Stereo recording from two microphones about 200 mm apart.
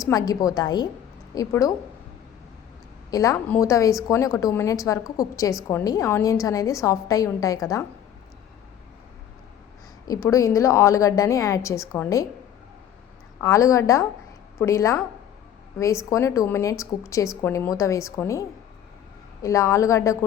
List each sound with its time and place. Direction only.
0.0 s a woman's voice: 20° left (ahead or behind)
3.1 s a woman's voice: 15° left (ahead or behind)
10.1 s a woman's voice: 15° left (ahead or behind)
13.4 s a woman's voice: 15° left (ahead or behind)
16.0 s a woman's voice: 15° left (ahead or behind)